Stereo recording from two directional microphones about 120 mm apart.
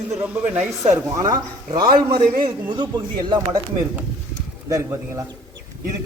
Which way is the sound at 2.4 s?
40° right (ahead or behind).